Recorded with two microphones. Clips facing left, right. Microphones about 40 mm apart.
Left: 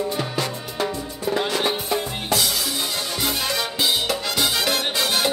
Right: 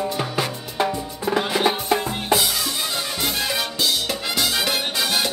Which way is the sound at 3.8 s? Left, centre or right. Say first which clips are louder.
Left 2 dB; left.